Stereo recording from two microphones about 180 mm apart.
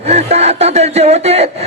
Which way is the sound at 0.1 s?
35° right (ahead or behind).